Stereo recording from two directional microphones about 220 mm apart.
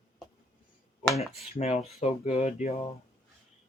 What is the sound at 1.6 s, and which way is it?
Speech, 30° left (ahead or behind).